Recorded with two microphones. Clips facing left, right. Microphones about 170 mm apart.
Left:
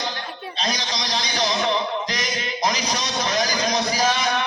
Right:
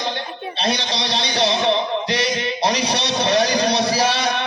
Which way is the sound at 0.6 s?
30° right (ahead or behind).